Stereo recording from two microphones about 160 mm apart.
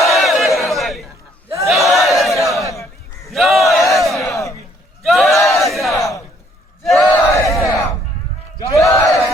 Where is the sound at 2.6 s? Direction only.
20° left (ahead or behind).